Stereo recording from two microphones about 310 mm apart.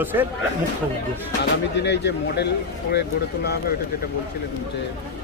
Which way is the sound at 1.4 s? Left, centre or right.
Left.